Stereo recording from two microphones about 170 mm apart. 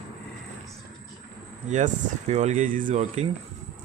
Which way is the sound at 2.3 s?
45° right (ahead or behind).